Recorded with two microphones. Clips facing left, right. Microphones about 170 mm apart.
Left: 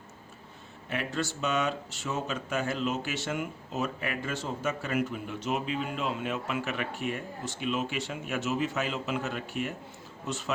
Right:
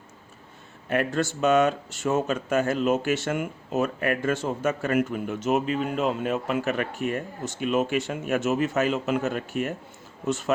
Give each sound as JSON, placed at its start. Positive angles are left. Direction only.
{"t": 0.9, "sound": "speech", "side_deg": -50}